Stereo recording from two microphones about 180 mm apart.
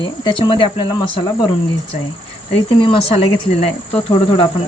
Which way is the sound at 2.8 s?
30° left (ahead or behind).